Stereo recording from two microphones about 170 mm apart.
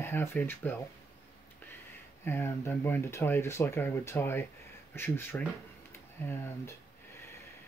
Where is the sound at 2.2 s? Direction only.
15° left (ahead or behind).